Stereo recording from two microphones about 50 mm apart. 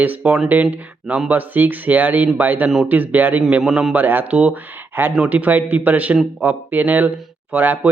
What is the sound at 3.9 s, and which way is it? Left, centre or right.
Speech, right.